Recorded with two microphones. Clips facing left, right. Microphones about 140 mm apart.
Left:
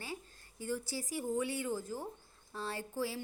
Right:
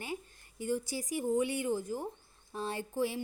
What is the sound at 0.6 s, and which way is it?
A woman's voice, 15° right (ahead or behind).